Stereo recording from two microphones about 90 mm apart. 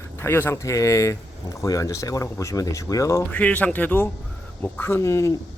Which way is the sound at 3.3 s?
15° left (ahead or behind).